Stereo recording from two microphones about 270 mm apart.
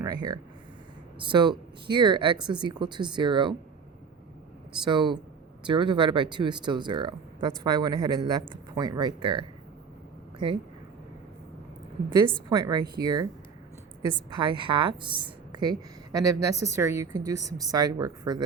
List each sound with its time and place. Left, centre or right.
0.0 s a woman's voice: centre
4.9 s a woman's voice: centre
12.5 s a woman's voice: centre
14.3 s a woman's voice: centre